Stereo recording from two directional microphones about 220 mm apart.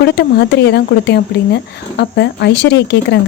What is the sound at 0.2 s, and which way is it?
Speech, 50° left (ahead or behind).